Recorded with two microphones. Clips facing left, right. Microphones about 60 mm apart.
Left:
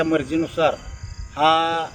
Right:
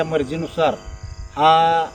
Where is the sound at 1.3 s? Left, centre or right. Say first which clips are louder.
Right 4 dB; centre.